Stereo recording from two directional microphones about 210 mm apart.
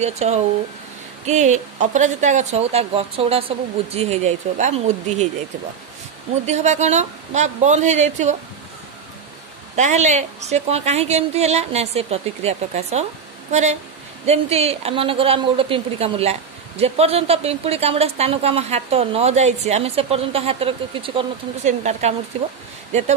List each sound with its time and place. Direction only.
0.0 s speech: 30° right (ahead or behind)
6.4 s speech: 35° right (ahead or behind)
9.8 s a woman's voice: 35° right (ahead or behind)